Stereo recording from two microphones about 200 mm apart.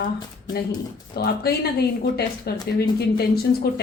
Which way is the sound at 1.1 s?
50° left (ahead or behind).